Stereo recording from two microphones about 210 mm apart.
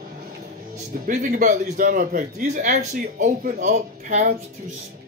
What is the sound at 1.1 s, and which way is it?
Speech, 40° right (ahead or behind).